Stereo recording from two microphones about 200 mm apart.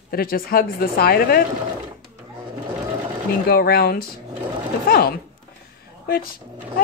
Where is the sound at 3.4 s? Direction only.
50° left (ahead or behind).